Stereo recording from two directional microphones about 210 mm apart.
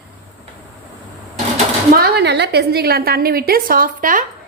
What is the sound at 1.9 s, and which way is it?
A woman's voice, 50° right (ahead or behind).